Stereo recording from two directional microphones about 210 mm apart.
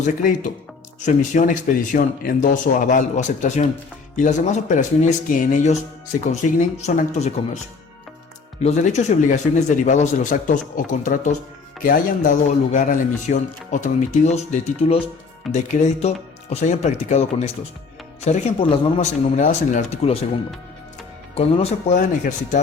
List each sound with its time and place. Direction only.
0.0 s a man's voice: 40° left (ahead or behind)
8.6 s a man's voice: 30° left (ahead or behind)
21.3 s a man's voice: 30° left (ahead or behind)